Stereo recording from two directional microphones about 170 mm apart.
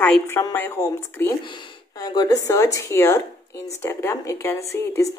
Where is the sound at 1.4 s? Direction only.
30° left (ahead or behind).